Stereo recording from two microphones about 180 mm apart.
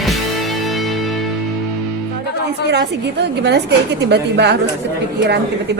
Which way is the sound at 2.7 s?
70° right (ahead or behind).